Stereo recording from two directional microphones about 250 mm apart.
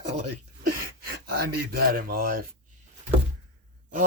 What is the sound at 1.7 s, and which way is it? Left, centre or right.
Speech, right.